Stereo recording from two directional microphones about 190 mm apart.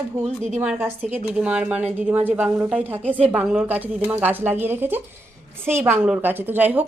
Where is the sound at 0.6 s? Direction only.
10° right (ahead or behind).